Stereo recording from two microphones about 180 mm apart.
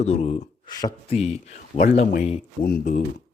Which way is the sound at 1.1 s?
35° left (ahead or behind).